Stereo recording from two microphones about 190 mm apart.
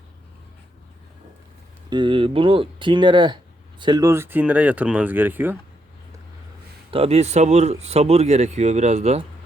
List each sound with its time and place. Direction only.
1.9 s speech: 25° right (ahead or behind)
6.9 s speech: 30° right (ahead or behind)